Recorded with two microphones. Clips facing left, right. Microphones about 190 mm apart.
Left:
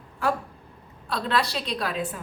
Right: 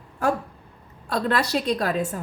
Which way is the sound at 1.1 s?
50° right (ahead or behind).